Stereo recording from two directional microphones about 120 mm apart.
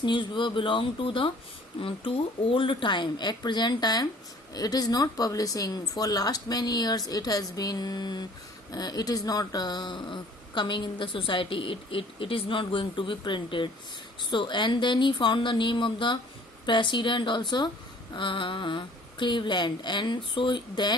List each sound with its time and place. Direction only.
0.0 s speech: 40° left (ahead or behind)